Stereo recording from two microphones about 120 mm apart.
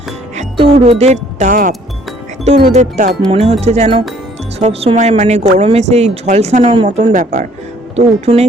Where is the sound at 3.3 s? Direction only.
60° right (ahead or behind).